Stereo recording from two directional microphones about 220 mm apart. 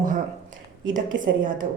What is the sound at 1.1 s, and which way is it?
Speech, 55° right (ahead or behind).